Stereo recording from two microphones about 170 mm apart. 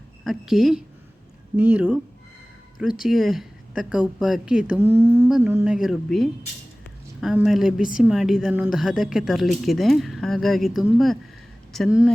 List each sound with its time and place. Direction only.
0.3 s a woman's voice: centre (ahead or behind)
3.0 s speech: centre (ahead or behind)